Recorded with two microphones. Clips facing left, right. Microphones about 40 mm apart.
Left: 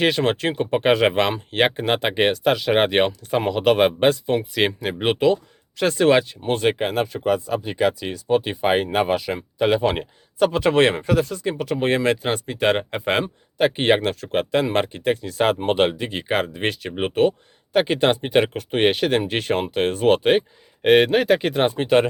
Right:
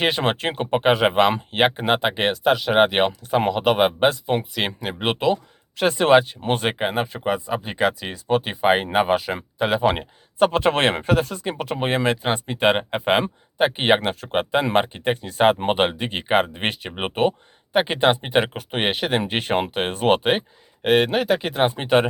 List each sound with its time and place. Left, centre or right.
0.0 s speech: right
0.7 s speech: centre
5.8 s speech: right
7.6 s speech: right
9.9 s speech: right
11.9 s speech: centre
19.3 s speech: right
20.8 s speech: centre
21.8 s speech: right